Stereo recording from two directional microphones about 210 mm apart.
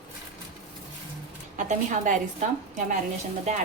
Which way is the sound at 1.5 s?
35° right (ahead or behind).